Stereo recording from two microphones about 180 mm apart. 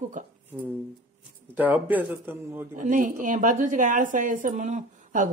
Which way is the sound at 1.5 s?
10° right (ahead or behind).